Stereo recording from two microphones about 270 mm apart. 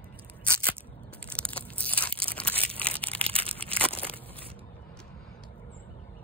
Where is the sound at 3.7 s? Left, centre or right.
Centre.